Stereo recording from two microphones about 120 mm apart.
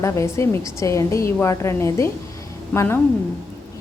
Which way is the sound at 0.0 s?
25° left (ahead or behind).